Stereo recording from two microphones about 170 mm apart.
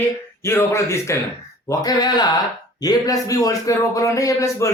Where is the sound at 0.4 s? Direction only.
15° left (ahead or behind).